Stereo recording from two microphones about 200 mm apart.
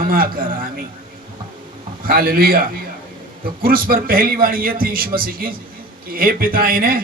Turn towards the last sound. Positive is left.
turn(degrees=-45)  # may be behind; listen again after turning